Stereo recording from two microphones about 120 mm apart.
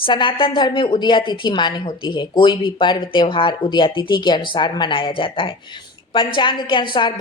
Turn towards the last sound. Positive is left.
turn(degrees=40)  # may be behind; listen again after turning